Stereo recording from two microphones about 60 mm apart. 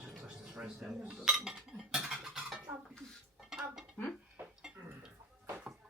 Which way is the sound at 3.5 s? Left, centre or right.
Centre.